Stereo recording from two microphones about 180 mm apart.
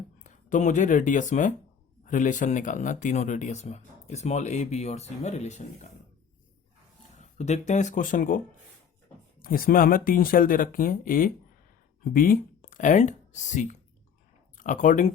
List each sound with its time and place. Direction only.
0.2 s speech: 45° left (ahead or behind)
7.2 s speech: 40° left (ahead or behind)
9.4 s speech: 50° left (ahead or behind)